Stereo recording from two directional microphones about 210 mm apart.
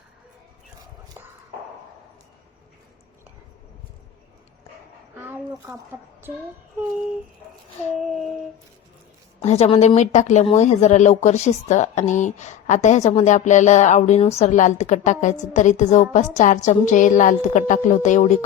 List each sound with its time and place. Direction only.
5.1 s a sound: 10° right (ahead or behind)
7.9 s child singing: centre (ahead or behind)
9.4 s speech: 30° left (ahead or behind)